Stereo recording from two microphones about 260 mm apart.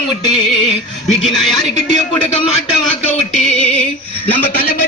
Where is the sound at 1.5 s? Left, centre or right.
Centre.